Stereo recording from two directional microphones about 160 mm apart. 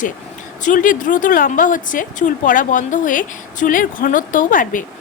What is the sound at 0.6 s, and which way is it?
A woman's voice, 55° left (ahead or behind).